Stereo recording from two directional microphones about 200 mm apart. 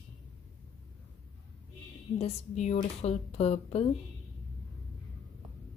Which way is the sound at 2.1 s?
35° left (ahead or behind).